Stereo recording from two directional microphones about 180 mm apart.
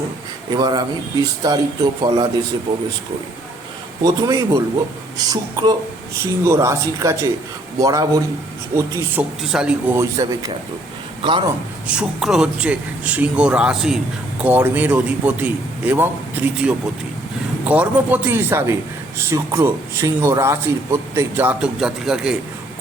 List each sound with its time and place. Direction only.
0.5 s speech: 25° right (ahead or behind)
4.0 s a man's voice: 20° right (ahead or behind)
9.5 s a man's voice: 5° right (ahead or behind)
10.0 s a man's voice: 20° right (ahead or behind)
11.9 s a man's voice: 5° right (ahead or behind)